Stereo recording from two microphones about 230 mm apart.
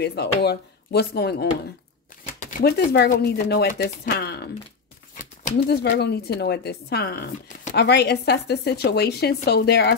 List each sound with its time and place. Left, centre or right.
0.0 s speech: left
2.6 s speech: left